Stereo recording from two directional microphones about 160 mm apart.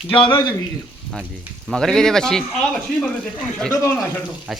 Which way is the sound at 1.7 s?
5° left (ahead or behind).